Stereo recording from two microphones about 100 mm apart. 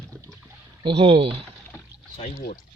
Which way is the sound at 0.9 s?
70° right (ahead or behind).